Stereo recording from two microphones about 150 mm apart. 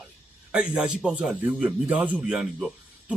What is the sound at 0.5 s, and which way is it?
A man's voice, 5° right (ahead or behind).